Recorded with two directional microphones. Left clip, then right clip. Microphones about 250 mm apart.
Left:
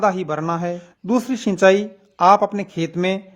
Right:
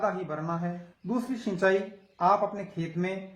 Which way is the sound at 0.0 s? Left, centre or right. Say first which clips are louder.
Left 11 dB; left.